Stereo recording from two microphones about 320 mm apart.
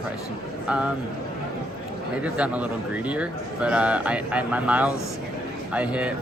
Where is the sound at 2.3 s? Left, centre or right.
Centre.